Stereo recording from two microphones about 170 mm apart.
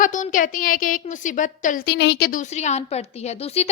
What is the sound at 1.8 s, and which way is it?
Speech, 90° left.